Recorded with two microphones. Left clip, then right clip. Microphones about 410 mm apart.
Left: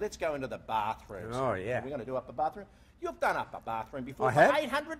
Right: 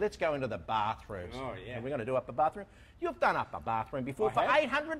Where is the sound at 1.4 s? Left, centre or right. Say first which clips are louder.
Left 9 dB; left.